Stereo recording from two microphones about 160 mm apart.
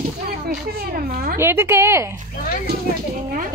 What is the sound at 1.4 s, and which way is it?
Speech, 15° right (ahead or behind).